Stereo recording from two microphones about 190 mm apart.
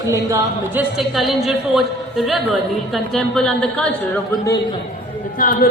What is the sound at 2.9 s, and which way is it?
Speech, centre (ahead or behind).